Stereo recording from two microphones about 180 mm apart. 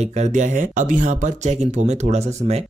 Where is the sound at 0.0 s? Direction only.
40° right (ahead or behind).